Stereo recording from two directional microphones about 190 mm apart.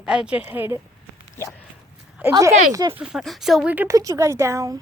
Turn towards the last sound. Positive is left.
turn(degrees=-15)  # may be behind; listen again after turning